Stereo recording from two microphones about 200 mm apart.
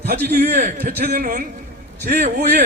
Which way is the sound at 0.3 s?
45° right (ahead or behind).